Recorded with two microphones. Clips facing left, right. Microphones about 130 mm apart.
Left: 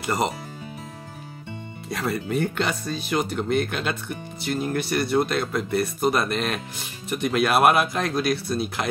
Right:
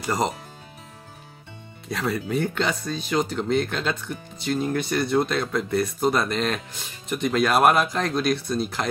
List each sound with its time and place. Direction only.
0.0 s speech: 5° left (ahead or behind)
1.9 s speech: centre (ahead or behind)